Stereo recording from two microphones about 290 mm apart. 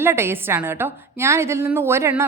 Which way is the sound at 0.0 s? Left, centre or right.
Centre.